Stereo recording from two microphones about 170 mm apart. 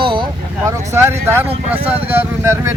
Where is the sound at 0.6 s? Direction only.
15° right (ahead or behind).